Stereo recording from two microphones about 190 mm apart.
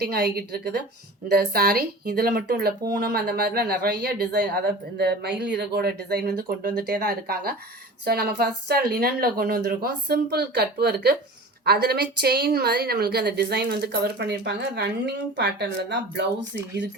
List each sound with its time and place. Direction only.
0.0 s speech: 55° right (ahead or behind)